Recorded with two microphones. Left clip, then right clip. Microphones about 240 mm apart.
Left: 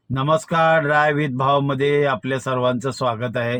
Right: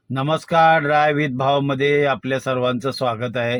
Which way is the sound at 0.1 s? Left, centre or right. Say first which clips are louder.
Even; left.